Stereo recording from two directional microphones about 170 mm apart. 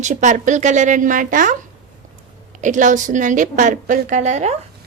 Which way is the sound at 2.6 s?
50° right (ahead or behind).